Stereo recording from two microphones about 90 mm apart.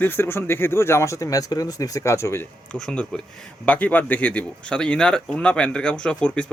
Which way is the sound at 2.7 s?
10° left (ahead or behind).